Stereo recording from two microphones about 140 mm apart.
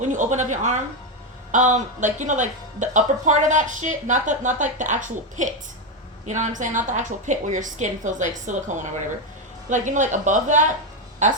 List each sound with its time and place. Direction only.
0.0 s a woman's voice: 60° right (ahead or behind)